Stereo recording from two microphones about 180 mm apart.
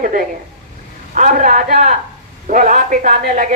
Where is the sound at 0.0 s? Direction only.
45° right (ahead or behind).